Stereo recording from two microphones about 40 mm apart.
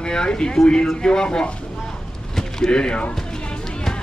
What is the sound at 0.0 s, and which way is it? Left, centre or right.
Speech, left.